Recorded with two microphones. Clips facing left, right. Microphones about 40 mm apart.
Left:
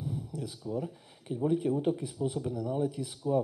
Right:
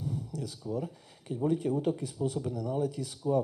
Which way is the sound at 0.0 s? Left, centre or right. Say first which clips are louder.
Right 1 dB; centre.